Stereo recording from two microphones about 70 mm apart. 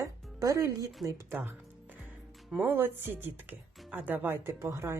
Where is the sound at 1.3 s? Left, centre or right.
Right.